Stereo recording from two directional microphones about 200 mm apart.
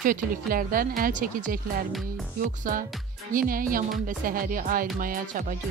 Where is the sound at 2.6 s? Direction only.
45° right (ahead or behind).